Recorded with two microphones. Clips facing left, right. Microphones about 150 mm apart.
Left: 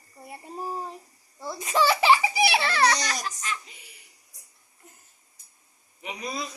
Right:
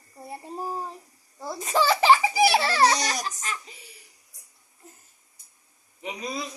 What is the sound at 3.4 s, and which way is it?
Speech, 40° right (ahead or behind).